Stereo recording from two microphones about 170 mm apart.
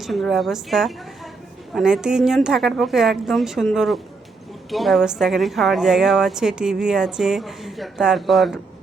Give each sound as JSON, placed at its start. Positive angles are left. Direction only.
{"t": 0.0, "sound": "a woman's voice", "side_deg": 0}